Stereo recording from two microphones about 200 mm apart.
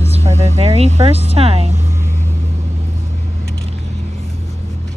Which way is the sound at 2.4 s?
30° right (ahead or behind).